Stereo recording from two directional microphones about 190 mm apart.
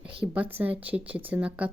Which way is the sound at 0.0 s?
10° right (ahead or behind).